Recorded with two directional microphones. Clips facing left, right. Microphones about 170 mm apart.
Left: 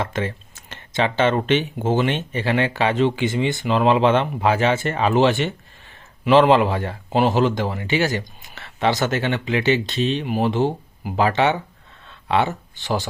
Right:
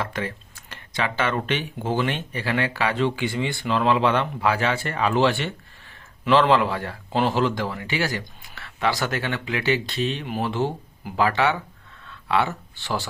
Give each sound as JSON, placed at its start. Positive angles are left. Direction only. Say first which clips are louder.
{"t": 0.0, "sound": "speech", "louder": "left 4 dB", "side_deg": 25}